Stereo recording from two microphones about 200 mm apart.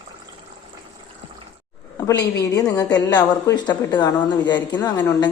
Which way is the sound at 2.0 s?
15° left (ahead or behind).